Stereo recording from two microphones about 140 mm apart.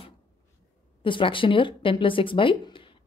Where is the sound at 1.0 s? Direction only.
35° left (ahead or behind).